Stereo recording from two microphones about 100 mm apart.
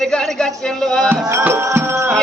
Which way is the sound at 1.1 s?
25° right (ahead or behind).